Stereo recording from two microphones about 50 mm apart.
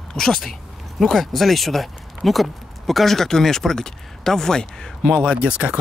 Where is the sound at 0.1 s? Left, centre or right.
Centre.